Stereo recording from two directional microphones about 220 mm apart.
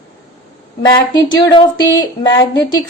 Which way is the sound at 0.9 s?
20° left (ahead or behind).